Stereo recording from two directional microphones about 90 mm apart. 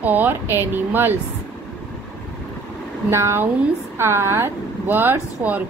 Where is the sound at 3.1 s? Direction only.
30° right (ahead or behind).